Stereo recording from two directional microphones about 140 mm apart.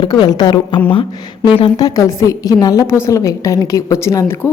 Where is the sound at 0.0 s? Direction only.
30° left (ahead or behind).